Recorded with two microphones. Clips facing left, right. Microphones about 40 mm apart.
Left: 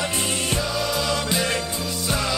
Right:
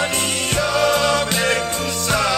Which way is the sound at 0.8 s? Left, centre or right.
Right.